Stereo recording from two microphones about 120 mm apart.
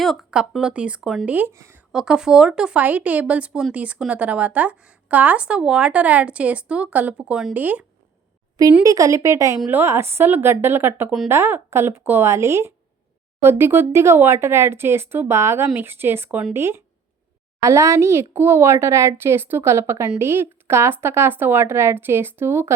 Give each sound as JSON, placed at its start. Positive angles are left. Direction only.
{"t": 0.0, "sound": "speech", "side_deg": 0}
{"t": 1.9, "sound": "speech", "side_deg": -5}
{"t": 8.8, "sound": "speech", "side_deg": -30}